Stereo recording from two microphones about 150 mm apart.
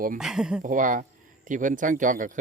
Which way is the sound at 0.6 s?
60° right (ahead or behind).